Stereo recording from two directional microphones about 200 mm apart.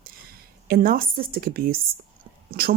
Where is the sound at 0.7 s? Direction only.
45° right (ahead or behind).